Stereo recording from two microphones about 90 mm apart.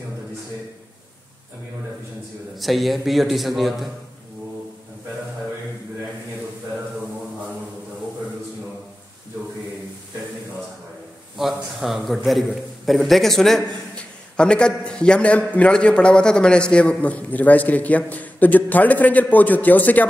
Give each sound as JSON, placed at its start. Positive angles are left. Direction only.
{"t": 2.5, "sound": "a man's voice", "side_deg": 0}
{"t": 11.3, "sound": "a man's voice", "side_deg": -5}